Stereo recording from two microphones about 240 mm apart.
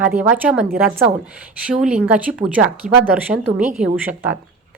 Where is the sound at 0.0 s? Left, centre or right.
Centre.